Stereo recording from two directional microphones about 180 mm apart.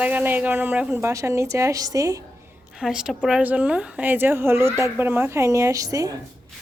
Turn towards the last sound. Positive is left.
turn(degrees=-20)  # may be behind; listen again after turning